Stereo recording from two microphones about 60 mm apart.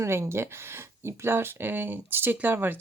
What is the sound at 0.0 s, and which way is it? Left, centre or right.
Speech, right.